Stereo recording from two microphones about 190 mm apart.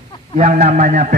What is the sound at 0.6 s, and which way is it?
Speech, 40° right (ahead or behind).